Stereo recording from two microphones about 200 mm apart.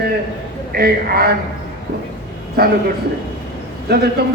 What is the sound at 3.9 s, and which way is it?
Speech, 55° right (ahead or behind).